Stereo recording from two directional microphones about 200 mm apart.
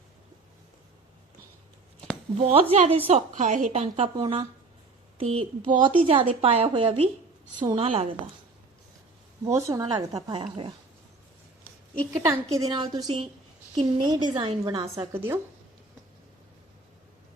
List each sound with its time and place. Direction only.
2.4 s a woman's voice: 30° right (ahead or behind)
9.4 s a woman's voice: 15° right (ahead or behind)
12.5 s speech: 20° right (ahead or behind)
15.1 s a woman's voice: 10° right (ahead or behind)